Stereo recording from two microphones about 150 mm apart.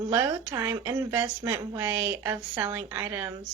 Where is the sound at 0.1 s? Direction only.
15° right (ahead or behind).